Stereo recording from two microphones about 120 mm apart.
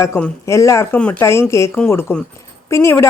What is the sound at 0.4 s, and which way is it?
Speech, 25° left (ahead or behind).